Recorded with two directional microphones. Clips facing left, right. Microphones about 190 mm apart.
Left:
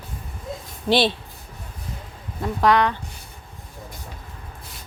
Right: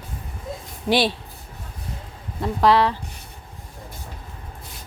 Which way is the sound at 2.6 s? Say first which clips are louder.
Right 1 dB; 30° right (ahead or behind).